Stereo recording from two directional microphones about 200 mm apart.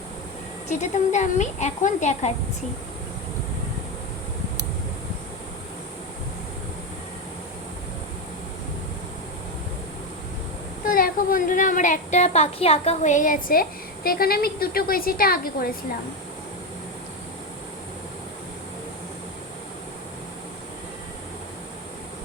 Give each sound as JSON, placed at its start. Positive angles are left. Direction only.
{"t": 0.7, "sound": "speech", "side_deg": 35}
{"t": 10.8, "sound": "a child's voice", "side_deg": 45}